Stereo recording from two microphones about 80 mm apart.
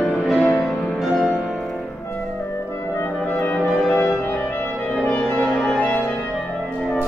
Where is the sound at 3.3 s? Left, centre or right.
Left.